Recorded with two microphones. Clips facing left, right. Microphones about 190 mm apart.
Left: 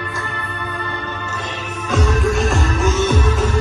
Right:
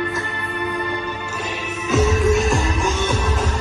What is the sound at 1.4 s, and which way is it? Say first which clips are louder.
Music: right 2 dB; 5° right (ahead or behind).